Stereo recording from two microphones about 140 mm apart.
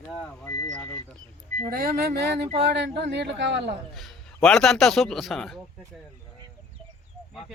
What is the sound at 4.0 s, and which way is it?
A man's voice, 5° left (ahead or behind).